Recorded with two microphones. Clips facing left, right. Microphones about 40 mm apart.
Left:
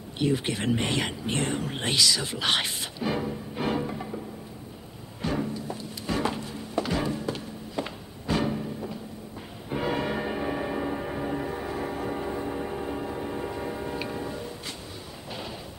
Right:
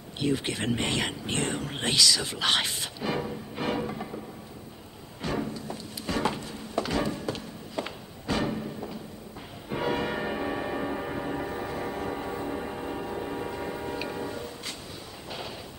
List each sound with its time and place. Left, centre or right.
0.2 s speech: centre
1.9 s speech: left
3.2 s music: centre
3.8 s music: centre
5.5 s a sound: left
6.4 s music: centre
8.5 s music: centre
10.2 s music: centre